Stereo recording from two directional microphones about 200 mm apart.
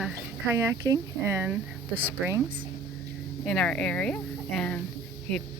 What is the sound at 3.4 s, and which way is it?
Speech, 5° left (ahead or behind).